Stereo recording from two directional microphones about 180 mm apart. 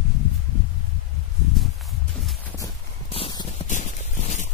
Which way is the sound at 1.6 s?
Centre (ahead or behind).